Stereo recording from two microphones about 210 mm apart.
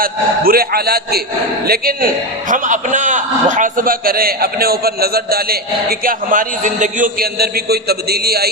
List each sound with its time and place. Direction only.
0.0 s a man's voice: 45° right (ahead or behind)